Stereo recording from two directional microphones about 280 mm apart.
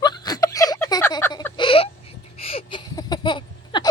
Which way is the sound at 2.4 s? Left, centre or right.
Centre.